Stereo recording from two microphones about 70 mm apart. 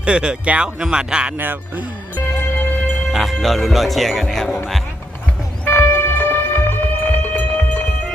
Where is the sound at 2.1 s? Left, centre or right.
Left.